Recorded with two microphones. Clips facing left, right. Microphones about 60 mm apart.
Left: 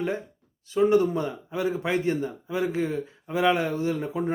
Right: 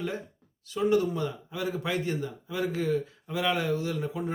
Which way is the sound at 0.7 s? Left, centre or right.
Left.